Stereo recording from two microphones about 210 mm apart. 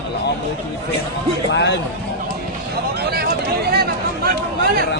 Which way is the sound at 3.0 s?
50° right (ahead or behind).